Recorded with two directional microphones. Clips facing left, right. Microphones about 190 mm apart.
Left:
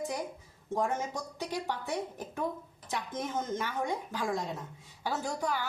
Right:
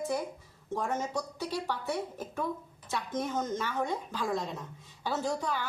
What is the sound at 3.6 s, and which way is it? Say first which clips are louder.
A woman's voice: right 1 dB; 15° left (ahead or behind).